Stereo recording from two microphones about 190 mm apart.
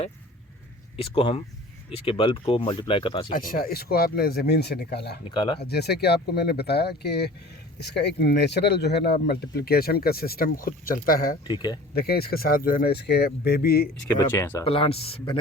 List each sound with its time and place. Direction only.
1.1 s speech: 30° left (ahead or behind)
3.3 s speech: 50° left (ahead or behind)
5.3 s speech: 25° left (ahead or behind)
5.5 s speech: 60° left (ahead or behind)
11.4 s speech: 20° left (ahead or behind)
11.9 s speech: 55° left (ahead or behind)
14.1 s speech: 15° left (ahead or behind)
14.6 s speech: 30° left (ahead or behind)